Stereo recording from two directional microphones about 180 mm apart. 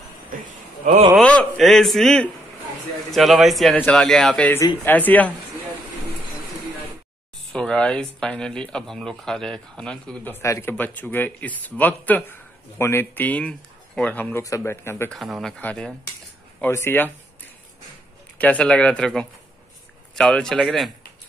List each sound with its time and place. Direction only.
0.5 s a man's voice: 35° right (ahead or behind)
1.1 s speech: 5° left (ahead or behind)
7.5 s speech: 5° left (ahead or behind)
15.1 s speech: centre (ahead or behind)
18.4 s speech: 5° left (ahead or behind)